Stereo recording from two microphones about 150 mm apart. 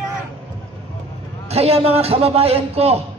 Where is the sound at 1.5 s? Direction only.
45° right (ahead or behind).